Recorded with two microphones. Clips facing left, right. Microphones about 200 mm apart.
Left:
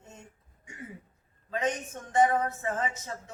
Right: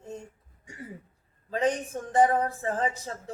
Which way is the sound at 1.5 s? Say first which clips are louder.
Right 4 dB; 35° right (ahead or behind).